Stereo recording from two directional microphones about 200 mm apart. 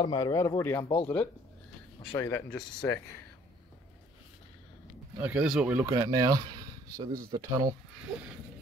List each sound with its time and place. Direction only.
0.0 s speech: 20° left (ahead or behind)
5.2 s speech: 5° right (ahead or behind)
5.9 s speech: 15° right (ahead or behind)